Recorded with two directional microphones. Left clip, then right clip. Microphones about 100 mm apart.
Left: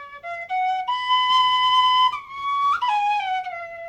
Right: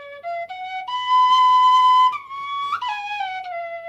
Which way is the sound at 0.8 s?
35° right (ahead or behind).